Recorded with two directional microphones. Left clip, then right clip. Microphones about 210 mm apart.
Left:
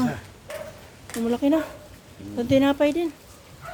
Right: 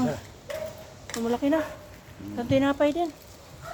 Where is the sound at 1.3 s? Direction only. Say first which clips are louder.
Left 3 dB; 30° left (ahead or behind).